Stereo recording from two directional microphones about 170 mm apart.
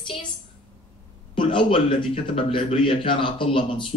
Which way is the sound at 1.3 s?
30° left (ahead or behind).